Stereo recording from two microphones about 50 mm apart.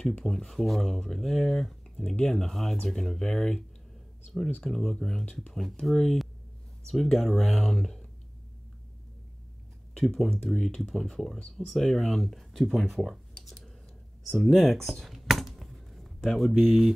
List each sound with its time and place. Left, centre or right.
0.2 s speech: centre
2.1 s speech: centre
2.5 s speech: centre
4.6 s speech: centre
9.9 s speech: centre
10.4 s speech: centre
13.0 s computer keyboard: centre
14.4 s speech: centre
14.9 s a sound: centre